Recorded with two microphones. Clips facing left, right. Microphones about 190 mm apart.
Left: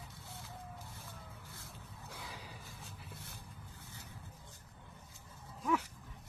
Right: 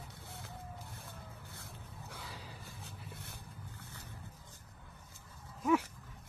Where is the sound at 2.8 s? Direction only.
65° right (ahead or behind).